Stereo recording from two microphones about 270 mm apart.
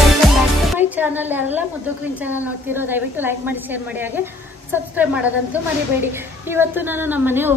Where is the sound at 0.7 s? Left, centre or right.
Centre.